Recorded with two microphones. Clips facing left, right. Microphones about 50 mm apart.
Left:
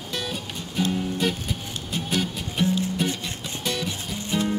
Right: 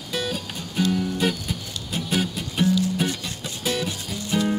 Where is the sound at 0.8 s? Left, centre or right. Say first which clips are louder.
Right 3 dB; left.